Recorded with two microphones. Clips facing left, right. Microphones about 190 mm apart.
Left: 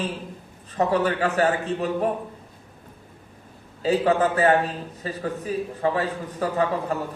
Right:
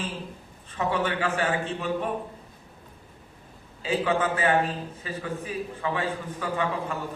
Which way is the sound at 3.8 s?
35° left (ahead or behind).